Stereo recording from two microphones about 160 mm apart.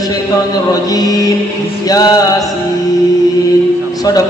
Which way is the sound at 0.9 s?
25° left (ahead or behind).